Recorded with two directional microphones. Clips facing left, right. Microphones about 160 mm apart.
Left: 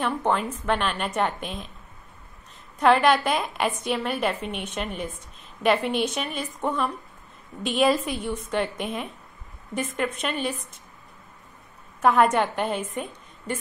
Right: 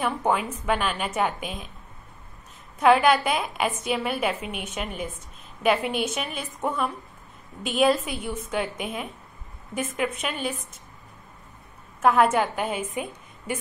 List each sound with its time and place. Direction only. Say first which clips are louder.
0.0 s a woman's voice: even; 5° right (ahead or behind)
2.8 s a woman's voice: even; 5° right (ahead or behind)
12.0 s a woman's voice: even; centre (ahead or behind)